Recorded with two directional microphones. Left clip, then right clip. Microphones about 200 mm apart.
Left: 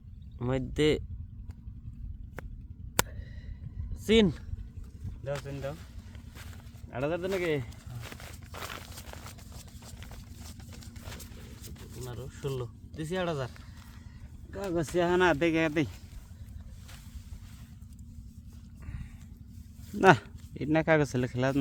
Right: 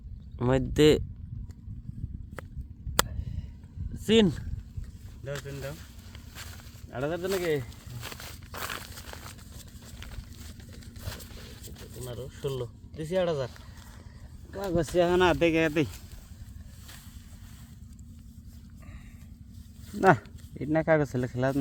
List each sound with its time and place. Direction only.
0.3 s speech: 30° right (ahead or behind)
3.0 s a sound: 5° left (ahead or behind)
3.9 s speech: 20° right (ahead or behind)
6.9 s speech: 15° right (ahead or behind)
8.0 s a sound: 45° right (ahead or behind)
12.0 s speech: 20° left (ahead or behind)
14.5 s speech: 10° right (ahead or behind); by 15.9 s 25° right (ahead or behind)
19.9 s speech: centre (ahead or behind)